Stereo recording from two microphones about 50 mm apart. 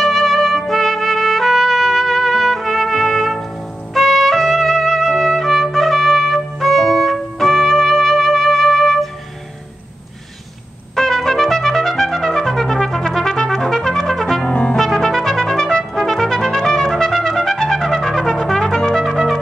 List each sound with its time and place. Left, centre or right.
0.0 s music: centre
3.9 s trumpet: centre
11.0 s trumpet: centre
14.4 s brass instrument: left
14.8 s trumpet: centre